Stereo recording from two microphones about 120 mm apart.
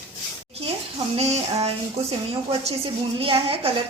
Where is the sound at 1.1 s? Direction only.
60° right (ahead or behind).